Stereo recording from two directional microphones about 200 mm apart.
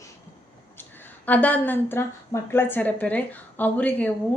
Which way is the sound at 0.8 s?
10° left (ahead or behind).